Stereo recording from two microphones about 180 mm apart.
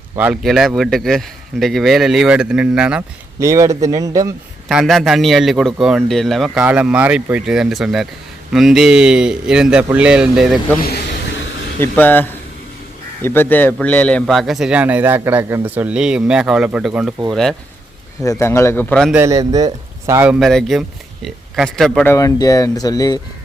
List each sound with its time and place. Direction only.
0.4 s a man's voice: centre (ahead or behind)
3.4 s a man's voice: 15° right (ahead or behind)
4.7 s a man's voice: centre (ahead or behind)
11.8 s a man's voice: 10° left (ahead or behind)
18.2 s a man's voice: 15° left (ahead or behind)
19.1 s a man's voice: 15° right (ahead or behind)
20.2 s a man's voice: centre (ahead or behind)
22.1 s speech: 20° left (ahead or behind)